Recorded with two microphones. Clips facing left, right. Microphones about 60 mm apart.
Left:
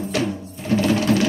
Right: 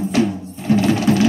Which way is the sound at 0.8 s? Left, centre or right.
Right.